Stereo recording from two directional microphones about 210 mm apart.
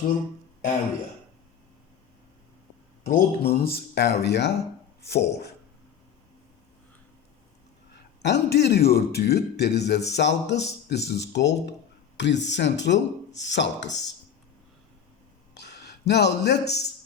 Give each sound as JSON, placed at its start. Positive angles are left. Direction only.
{"t": 3.1, "sound": "speech", "side_deg": 45}
{"t": 8.2, "sound": "speech", "side_deg": 55}
{"t": 15.5, "sound": "a sound", "side_deg": 55}